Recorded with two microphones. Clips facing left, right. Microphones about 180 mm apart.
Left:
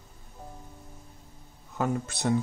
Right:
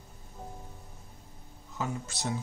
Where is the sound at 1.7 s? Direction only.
55° left (ahead or behind).